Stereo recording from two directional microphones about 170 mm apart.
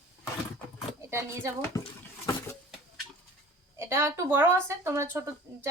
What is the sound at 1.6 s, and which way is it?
Speech, 15° left (ahead or behind).